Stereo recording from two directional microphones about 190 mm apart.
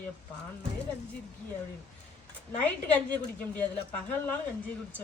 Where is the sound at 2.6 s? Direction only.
5° left (ahead or behind).